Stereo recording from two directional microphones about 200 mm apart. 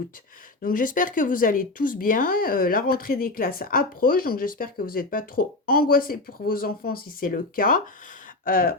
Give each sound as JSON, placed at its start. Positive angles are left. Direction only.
{"t": 0.6, "sound": "speech", "side_deg": 45}